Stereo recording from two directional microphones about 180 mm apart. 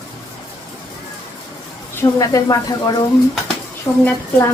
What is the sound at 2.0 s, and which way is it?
A woman's voice, 20° left (ahead or behind).